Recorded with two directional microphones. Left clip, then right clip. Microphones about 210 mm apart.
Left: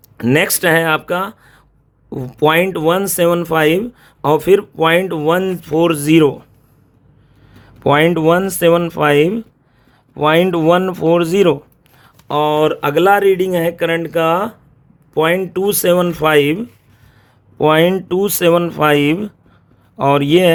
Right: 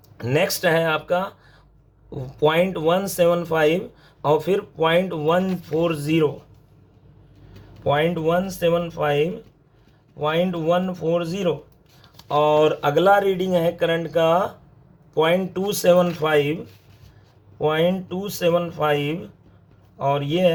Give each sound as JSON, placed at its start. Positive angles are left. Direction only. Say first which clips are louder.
{"t": 0.2, "sound": "speech", "louder": "left 6 dB", "side_deg": 45}
{"t": 7.9, "sound": "speech", "louder": "left 9 dB", "side_deg": 60}
{"t": 12.3, "sound": "speech", "louder": "left 3 dB", "side_deg": 40}